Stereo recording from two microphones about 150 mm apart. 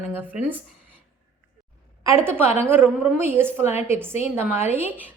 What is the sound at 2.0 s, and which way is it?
A woman's voice, 15° right (ahead or behind).